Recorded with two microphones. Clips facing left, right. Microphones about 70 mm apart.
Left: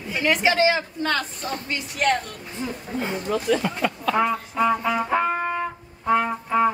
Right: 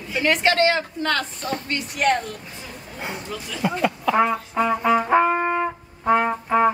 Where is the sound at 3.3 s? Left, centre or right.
Left.